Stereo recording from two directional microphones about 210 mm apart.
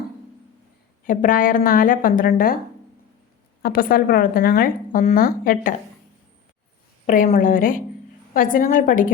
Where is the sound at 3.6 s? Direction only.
40° left (ahead or behind).